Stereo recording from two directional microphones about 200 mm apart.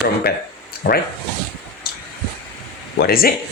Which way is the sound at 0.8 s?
60° left (ahead or behind).